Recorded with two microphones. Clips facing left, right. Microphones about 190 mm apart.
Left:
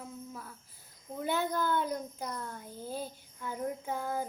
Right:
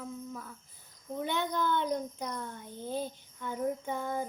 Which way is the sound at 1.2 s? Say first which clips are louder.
Left 1 dB; 5° left (ahead or behind).